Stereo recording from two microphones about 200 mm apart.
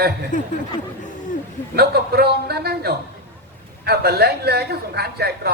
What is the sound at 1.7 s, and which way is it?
Speech, 55° right (ahead or behind).